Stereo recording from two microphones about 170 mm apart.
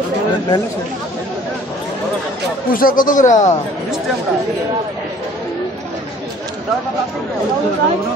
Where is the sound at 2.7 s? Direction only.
55° left (ahead or behind).